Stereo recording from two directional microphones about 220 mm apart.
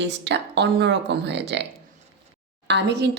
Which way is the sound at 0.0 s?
50° right (ahead or behind).